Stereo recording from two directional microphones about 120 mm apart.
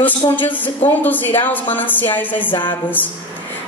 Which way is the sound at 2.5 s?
45° left (ahead or behind).